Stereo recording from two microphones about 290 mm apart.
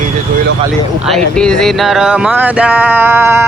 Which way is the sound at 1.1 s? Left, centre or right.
Centre.